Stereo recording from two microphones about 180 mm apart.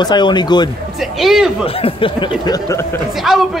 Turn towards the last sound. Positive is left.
turn(degrees=0)  # may be behind; listen again after turning